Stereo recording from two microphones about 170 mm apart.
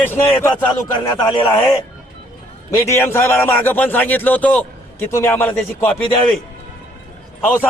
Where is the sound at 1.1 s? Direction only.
25° left (ahead or behind).